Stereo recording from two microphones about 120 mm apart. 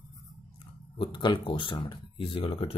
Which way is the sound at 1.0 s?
40° left (ahead or behind).